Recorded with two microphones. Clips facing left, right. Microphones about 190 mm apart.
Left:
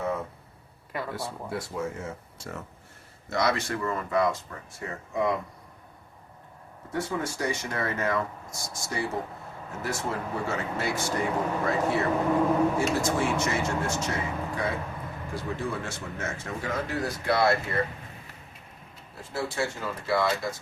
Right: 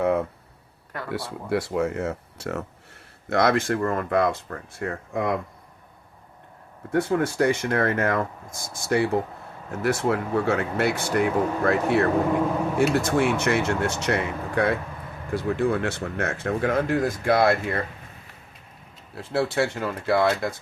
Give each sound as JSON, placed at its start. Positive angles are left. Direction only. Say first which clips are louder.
{"t": 0.0, "sound": "a sound", "louder": "right 8 dB", "side_deg": -65}
{"t": 1.1, "sound": "speech", "louder": "right 7 dB", "side_deg": -70}
{"t": 3.2, "sound": "speech", "louder": "right 6 dB", "side_deg": -55}
{"t": 6.9, "sound": "speech", "louder": "right 8 dB", "side_deg": -60}
{"t": 19.1, "sound": "speech", "louder": "right 8 dB", "side_deg": -65}